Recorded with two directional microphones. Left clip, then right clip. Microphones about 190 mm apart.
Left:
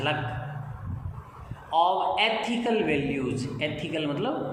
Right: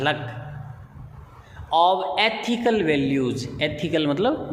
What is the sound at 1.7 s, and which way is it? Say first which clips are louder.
A man's voice: right 4 dB; 50° right (ahead or behind).